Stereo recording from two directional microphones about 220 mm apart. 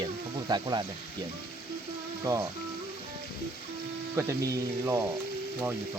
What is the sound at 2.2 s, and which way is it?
Speech, 15° right (ahead or behind).